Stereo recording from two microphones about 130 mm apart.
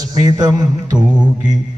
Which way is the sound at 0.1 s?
30° right (ahead or behind).